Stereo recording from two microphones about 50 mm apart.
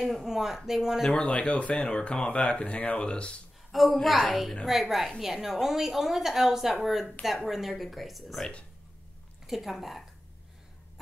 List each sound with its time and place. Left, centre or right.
0.0 s a woman's voice: centre
1.2 s speech: left
3.7 s a woman's voice: centre
9.5 s a woman's voice: centre